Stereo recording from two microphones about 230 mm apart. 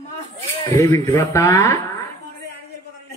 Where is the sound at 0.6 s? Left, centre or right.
Centre.